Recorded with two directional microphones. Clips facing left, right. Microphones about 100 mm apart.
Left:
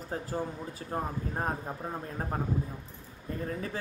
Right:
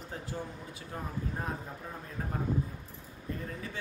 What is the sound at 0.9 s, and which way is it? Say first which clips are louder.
Speech: left 7 dB; 35° left (ahead or behind).